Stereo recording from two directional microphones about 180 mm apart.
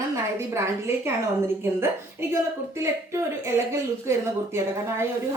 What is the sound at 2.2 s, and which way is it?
A woman's voice, 15° right (ahead or behind).